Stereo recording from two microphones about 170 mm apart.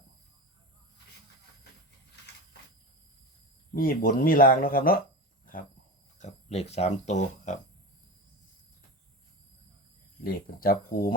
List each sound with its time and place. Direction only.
3.8 s speech: 60° left (ahead or behind)
6.1 s speech: 40° left (ahead or behind)
10.2 s speech: 60° left (ahead or behind)